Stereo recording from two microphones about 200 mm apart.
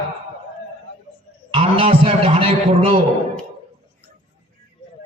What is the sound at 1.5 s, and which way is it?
A man's voice, 25° right (ahead or behind).